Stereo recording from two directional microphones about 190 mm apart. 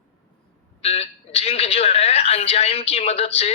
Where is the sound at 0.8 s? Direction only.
30° left (ahead or behind).